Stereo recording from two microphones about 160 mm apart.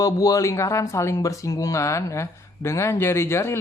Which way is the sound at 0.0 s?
20° left (ahead or behind).